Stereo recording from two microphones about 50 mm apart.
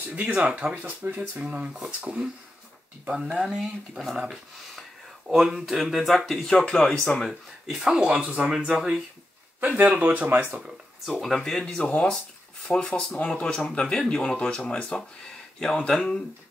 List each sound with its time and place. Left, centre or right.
0.1 s speech: right
3.3 s speech: centre
5.3 s speech: centre
6.5 s speech: left
7.2 s speech: centre
8.1 s speech: right
8.5 s speech: centre
9.6 s speech: right
11.1 s speech: centre
11.6 s speech: left
12.7 s speech: left
13.4 s speech: centre